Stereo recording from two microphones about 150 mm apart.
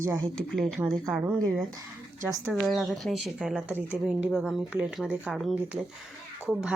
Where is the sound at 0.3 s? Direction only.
5° left (ahead or behind).